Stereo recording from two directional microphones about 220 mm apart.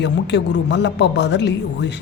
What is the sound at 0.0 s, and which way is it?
Speech, 50° left (ahead or behind).